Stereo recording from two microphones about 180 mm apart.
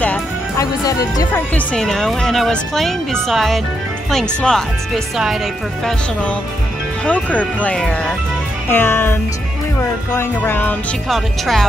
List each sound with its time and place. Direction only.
0.6 s speech: 20° left (ahead or behind)
1.5 s speech: 5° left (ahead or behind)
7.1 s music: 10° left (ahead or behind)
11.1 s speech: centre (ahead or behind)